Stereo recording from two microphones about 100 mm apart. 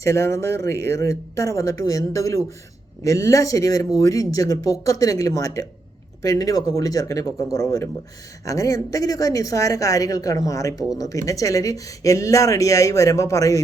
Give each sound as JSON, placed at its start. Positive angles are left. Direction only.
{"t": 0.0, "sound": "speech", "side_deg": 30}